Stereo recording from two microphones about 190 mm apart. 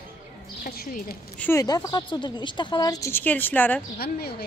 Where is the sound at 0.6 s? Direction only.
50° left (ahead or behind).